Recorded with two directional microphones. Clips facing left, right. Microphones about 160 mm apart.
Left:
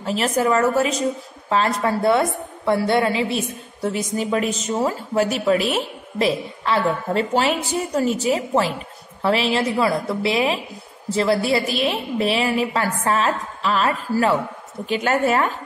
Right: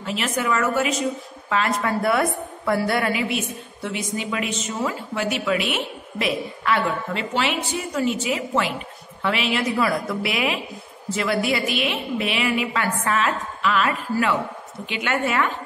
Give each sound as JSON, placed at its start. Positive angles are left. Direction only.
{"t": 0.0, "sound": "a woman's voice", "side_deg": 35}
{"t": 7.2, "sound": "a woman's voice", "side_deg": 40}